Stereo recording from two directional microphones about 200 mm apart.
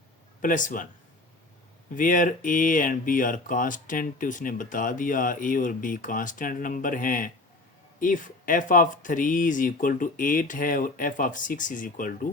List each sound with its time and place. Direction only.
0.4 s speech: 40° left (ahead or behind)
2.0 s speech: 40° left (ahead or behind)